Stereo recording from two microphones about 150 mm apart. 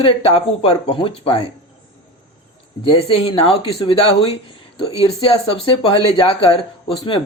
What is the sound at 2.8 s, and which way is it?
Speech, 40° left (ahead or behind).